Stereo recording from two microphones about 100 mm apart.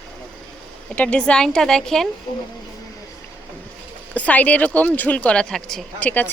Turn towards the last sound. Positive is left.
turn(degrees=15)  # may be behind; listen again after turning